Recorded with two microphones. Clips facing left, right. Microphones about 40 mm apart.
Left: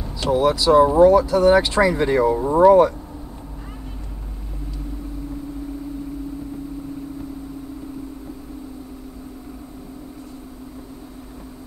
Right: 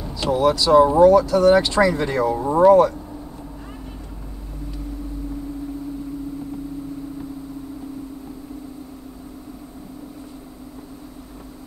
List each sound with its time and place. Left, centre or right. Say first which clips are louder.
0.0 s speech: even; centre